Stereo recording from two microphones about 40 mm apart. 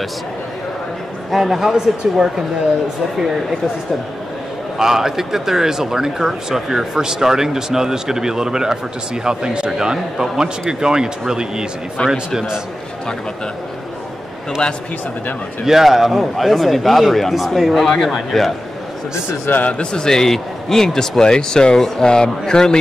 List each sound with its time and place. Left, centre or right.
1.3 s speech: centre
4.7 s speech: centre
12.0 s a man's voice: left
15.6 s a man's voice: centre
19.6 s a man's voice: left